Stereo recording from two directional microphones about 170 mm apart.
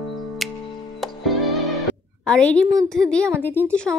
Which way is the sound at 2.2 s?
5° left (ahead or behind).